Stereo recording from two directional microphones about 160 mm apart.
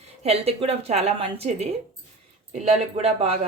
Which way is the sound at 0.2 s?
40° right (ahead or behind).